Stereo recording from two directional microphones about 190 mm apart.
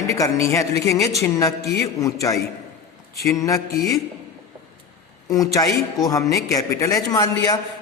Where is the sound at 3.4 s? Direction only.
15° left (ahead or behind).